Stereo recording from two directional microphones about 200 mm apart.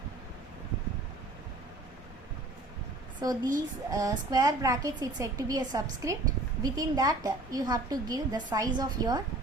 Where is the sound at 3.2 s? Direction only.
20° right (ahead or behind).